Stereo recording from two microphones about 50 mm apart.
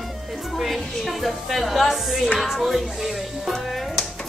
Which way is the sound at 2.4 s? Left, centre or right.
Centre.